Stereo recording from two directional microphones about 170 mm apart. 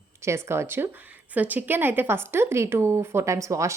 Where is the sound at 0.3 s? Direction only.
15° right (ahead or behind).